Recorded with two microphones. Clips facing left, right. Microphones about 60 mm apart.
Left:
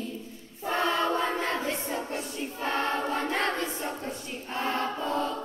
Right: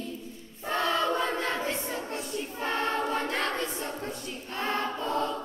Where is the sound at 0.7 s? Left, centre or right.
Left.